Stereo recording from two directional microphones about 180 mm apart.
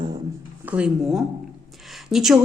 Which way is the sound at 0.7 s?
10° right (ahead or behind).